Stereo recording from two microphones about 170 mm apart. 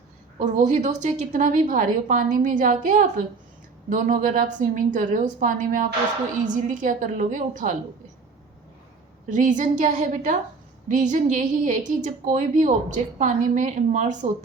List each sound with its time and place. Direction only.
0.3 s a woman's voice: 45° right (ahead or behind)
9.3 s a woman's voice: 45° right (ahead or behind)